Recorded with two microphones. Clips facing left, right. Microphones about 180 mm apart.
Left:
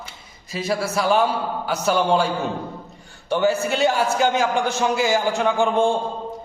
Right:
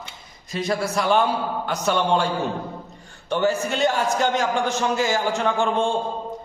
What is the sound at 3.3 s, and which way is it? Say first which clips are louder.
A man's voice: left 2 dB; 10° left (ahead or behind).